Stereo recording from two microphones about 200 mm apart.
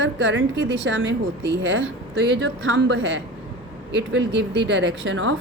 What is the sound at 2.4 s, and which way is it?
Speech, 70° right (ahead or behind).